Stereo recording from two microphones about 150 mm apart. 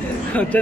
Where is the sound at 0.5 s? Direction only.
10° left (ahead or behind).